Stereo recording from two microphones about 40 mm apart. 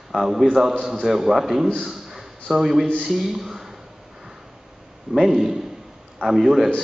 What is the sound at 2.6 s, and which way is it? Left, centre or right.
A man's voice, centre.